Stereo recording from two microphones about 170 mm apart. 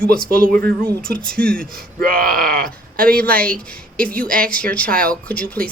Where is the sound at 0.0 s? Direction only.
5° left (ahead or behind).